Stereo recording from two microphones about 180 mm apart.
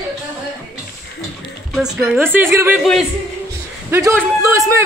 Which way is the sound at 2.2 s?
10° right (ahead or behind).